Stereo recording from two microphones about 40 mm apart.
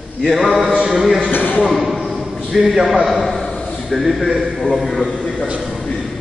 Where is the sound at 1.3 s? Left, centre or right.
Left.